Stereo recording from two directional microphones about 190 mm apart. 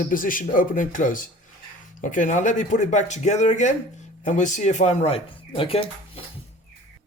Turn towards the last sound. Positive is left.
turn(degrees=30)  # may be behind; listen again after turning